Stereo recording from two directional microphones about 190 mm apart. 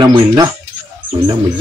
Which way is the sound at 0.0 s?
25° right (ahead or behind).